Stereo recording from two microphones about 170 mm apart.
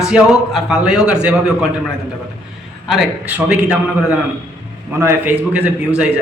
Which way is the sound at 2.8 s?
5° right (ahead or behind).